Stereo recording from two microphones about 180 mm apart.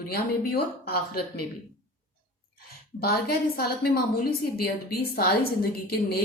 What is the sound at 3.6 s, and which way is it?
A woman's voice, 55° left (ahead or behind).